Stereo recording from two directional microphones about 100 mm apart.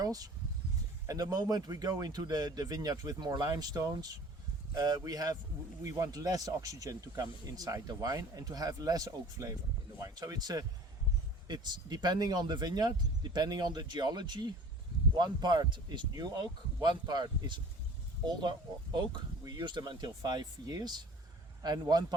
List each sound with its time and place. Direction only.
0.0 s speech: 40° right (ahead or behind)